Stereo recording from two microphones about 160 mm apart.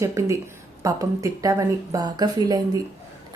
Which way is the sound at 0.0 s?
20° right (ahead or behind).